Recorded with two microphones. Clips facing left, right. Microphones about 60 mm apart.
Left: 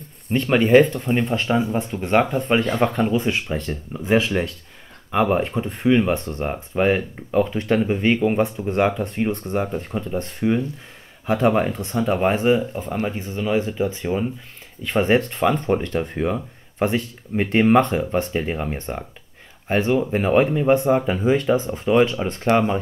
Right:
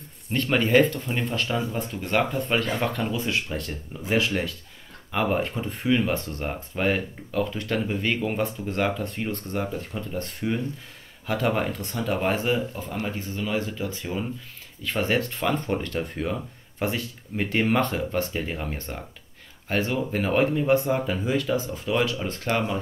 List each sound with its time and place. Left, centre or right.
0.3 s speech: centre
1.3 s speech: left
5.1 s speech: centre
13.2 s speech: centre